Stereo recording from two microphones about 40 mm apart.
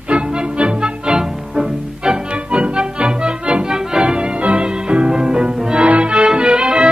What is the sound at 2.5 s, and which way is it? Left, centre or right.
Music, right.